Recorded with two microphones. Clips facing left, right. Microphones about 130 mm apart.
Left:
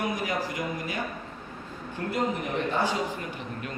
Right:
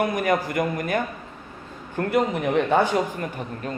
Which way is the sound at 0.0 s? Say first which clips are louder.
Right 7 dB; 55° right (ahead or behind).